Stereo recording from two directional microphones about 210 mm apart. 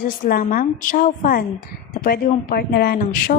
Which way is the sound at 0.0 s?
40° left (ahead or behind).